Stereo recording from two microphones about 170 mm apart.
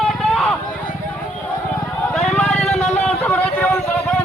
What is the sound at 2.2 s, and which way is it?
Vehicle, 5° left (ahead or behind).